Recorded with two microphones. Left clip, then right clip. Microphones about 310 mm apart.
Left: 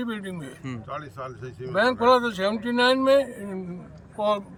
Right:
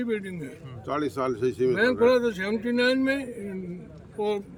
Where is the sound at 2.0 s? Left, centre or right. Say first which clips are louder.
Left 2 dB; centre.